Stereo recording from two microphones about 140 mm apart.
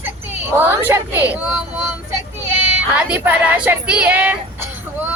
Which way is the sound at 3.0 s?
10° right (ahead or behind).